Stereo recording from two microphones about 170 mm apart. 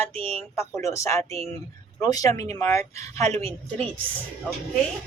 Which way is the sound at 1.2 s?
35° right (ahead or behind).